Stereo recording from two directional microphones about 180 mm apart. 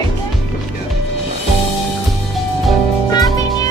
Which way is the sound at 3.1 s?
20° left (ahead or behind).